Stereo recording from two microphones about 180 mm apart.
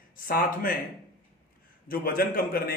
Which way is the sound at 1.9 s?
55° left (ahead or behind).